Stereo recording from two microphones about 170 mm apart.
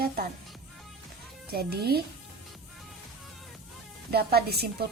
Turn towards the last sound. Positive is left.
turn(degrees=-70)  # may be behind; listen again after turning